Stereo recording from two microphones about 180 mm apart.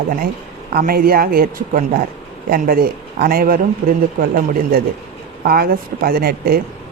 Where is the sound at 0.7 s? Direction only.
55° right (ahead or behind).